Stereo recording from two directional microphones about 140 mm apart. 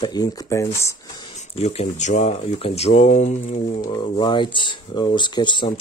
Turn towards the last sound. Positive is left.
turn(degrees=30)  # may be behind; listen again after turning